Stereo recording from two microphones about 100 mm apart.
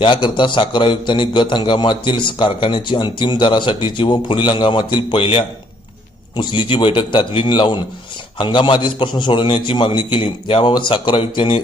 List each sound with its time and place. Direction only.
0.0 s a man's voice: 50° left (ahead or behind); by 5.5 s 65° left (ahead or behind)
6.3 s a man's voice: 55° left (ahead or behind)